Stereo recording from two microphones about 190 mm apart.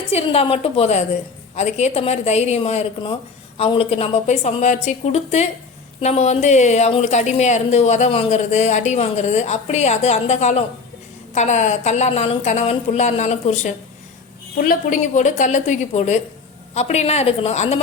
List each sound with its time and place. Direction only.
0.1 s a woman's voice: 30° left (ahead or behind)